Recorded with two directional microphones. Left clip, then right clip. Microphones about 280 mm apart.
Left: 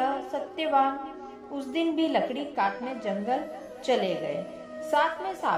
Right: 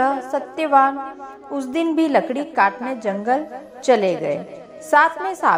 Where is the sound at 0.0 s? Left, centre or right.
Right.